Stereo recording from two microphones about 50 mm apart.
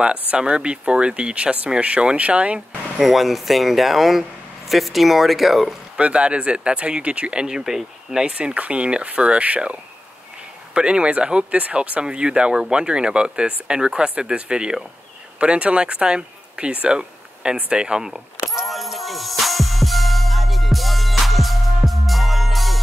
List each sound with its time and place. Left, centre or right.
0.3 s speech: right
3.0 s speech: centre
5.9 s speech: right
7.4 s speech: centre
8.4 s speech: right
18.4 s music: centre